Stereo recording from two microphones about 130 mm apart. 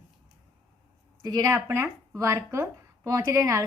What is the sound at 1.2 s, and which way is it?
A woman's voice, 30° right (ahead or behind).